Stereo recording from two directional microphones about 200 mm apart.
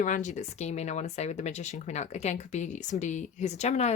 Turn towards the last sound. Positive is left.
turn(degrees=35)  # may be behind; listen again after turning